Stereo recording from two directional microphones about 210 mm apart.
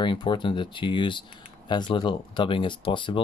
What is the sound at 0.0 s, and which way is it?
Speech, 20° left (ahead or behind).